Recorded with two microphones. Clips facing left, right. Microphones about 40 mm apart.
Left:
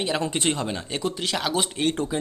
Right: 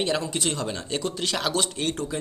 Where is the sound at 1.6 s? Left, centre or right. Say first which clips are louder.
Left 3 dB; centre.